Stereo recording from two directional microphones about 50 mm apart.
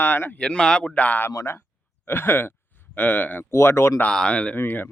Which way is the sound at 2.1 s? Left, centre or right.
Left.